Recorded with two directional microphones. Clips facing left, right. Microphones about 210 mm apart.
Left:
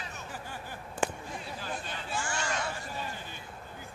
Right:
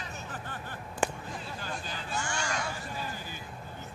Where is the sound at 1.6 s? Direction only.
Centre (ahead or behind).